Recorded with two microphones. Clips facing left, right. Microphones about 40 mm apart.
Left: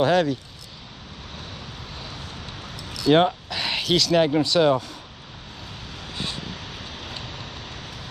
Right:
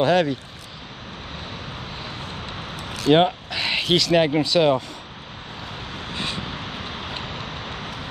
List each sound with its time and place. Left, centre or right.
0.0 s speech: right
2.0 s a sound: right
4.4 s speech: centre
5.9 s vehicle: right